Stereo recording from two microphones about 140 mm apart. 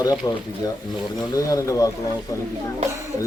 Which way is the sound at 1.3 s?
25° left (ahead or behind).